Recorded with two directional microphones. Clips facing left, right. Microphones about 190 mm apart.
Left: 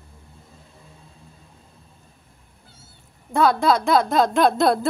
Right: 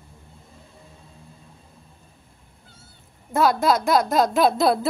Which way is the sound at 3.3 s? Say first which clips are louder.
Left 1 dB; 5° right (ahead or behind).